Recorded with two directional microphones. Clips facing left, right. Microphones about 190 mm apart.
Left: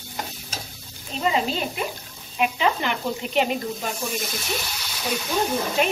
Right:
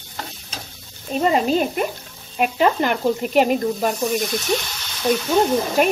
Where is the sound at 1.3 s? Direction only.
50° right (ahead or behind).